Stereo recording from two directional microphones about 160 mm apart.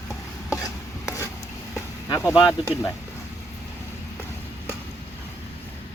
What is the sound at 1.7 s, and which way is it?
Vehicle, 15° left (ahead or behind).